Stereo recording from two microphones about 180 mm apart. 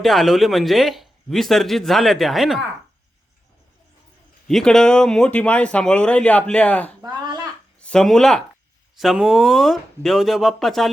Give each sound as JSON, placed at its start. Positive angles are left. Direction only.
{"t": 0.0, "sound": "speech", "side_deg": 0}
{"t": 4.4, "sound": "speech", "side_deg": 0}
{"t": 7.0, "sound": "a sound", "side_deg": -25}
{"t": 7.8, "sound": "speech", "side_deg": 5}